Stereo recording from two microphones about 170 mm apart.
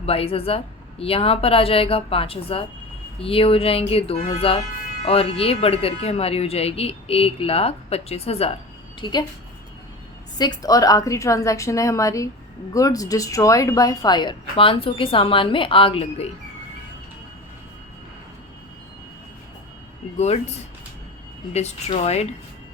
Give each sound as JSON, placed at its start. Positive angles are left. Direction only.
{"t": 0.0, "sound": "speech", "side_deg": 35}
{"t": 9.0, "sound": "a woman's voice", "side_deg": 25}
{"t": 10.3, "sound": "a woman's voice", "side_deg": 25}
{"t": 20.1, "sound": "speech", "side_deg": 40}
{"t": 21.5, "sound": "speech", "side_deg": 40}